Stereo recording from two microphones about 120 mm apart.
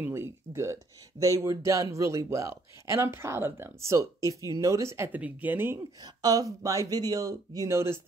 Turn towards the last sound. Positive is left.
turn(degrees=-20)  # may be behind; listen again after turning